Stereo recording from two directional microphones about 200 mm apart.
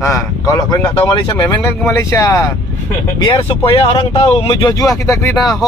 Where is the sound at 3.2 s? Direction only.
25° left (ahead or behind).